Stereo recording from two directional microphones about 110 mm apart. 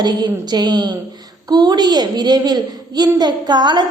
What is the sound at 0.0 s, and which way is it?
A woman's voice, 40° right (ahead or behind).